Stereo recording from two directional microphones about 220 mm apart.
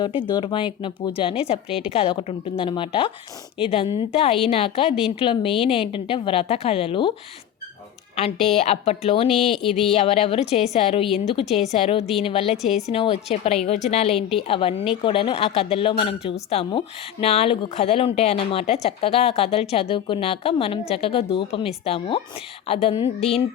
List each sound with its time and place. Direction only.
0.0 s speech: 20° left (ahead or behind)
8.5 s speech: 30° left (ahead or behind)
9.3 s speech: centre (ahead or behind)
9.9 s speech: 30° left (ahead or behind)
14.2 s speech: centre (ahead or behind)
14.4 s speech: 25° left (ahead or behind)